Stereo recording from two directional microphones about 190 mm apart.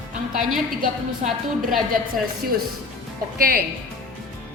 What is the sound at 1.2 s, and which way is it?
Speech, 35° right (ahead or behind).